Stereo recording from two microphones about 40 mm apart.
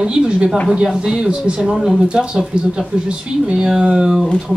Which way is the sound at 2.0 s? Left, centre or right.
Right.